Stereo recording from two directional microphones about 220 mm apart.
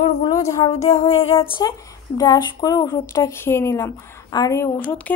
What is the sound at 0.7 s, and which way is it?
Music, 30° left (ahead or behind).